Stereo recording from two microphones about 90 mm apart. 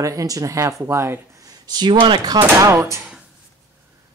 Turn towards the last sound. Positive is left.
turn(degrees=-35)  # may be behind; listen again after turning